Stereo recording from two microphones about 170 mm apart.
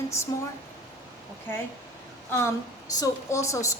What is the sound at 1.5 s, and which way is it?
Speech, 10° left (ahead or behind).